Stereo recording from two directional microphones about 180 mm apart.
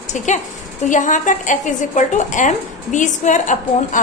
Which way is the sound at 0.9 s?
45° left (ahead or behind).